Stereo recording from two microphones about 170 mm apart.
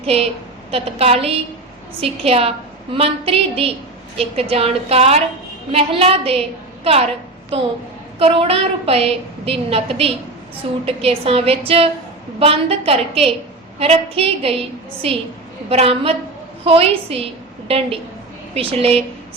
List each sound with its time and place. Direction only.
0.0 s a woman's voice: 35° right (ahead or behind)